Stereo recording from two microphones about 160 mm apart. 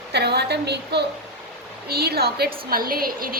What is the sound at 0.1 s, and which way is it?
Speech, 90° right.